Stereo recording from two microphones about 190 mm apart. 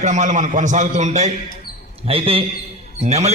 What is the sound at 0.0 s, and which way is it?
A man's voice, 40° right (ahead or behind).